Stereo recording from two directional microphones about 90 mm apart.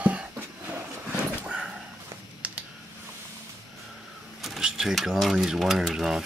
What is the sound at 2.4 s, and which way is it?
Computer keyboard, 15° right (ahead or behind).